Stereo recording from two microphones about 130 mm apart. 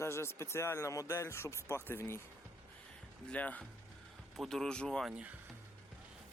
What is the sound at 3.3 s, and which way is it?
Speech, 10° left (ahead or behind).